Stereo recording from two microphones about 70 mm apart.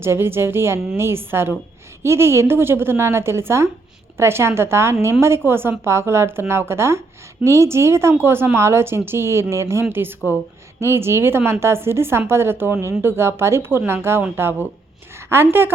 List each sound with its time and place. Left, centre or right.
0.0 s speech: right